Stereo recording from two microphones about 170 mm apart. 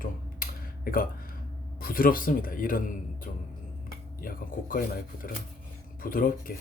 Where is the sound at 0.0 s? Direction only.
60° left (ahead or behind).